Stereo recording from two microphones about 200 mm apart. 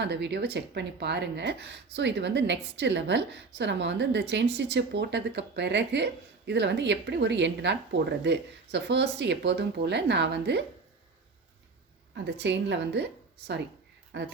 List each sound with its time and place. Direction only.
0.0 s speech: 60° right (ahead or behind)
12.1 s speech: 60° right (ahead or behind)
14.1 s speech: 60° right (ahead or behind)